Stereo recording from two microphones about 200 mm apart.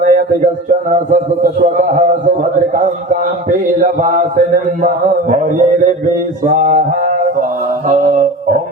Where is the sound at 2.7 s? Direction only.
40° right (ahead or behind).